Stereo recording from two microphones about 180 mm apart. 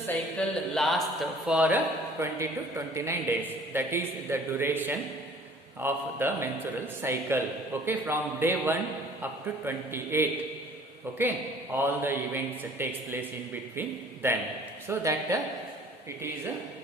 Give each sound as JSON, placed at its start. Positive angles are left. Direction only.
{"t": 0.3, "sound": "a man's voice", "side_deg": 0}